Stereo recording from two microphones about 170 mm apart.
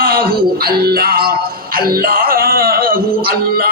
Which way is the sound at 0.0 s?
60° right (ahead or behind).